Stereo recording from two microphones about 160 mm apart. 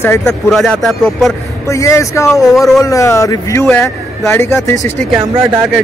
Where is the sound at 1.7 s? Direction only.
20° left (ahead or behind).